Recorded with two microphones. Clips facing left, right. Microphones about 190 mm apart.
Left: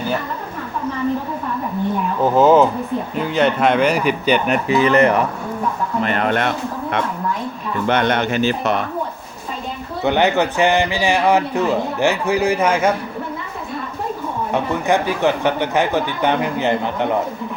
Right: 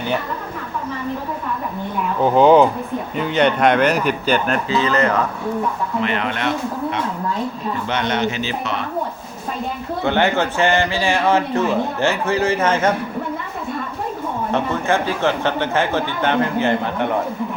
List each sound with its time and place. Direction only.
2.2 s a man's voice: 5° left (ahead or behind); by 5.2 s 25° left (ahead or behind)
6.0 s speech: 45° left (ahead or behind)
7.9 s speech: 55° left (ahead or behind)
10.0 s a man's voice: 20° left (ahead or behind)
14.5 s a man's voice: 15° left (ahead or behind)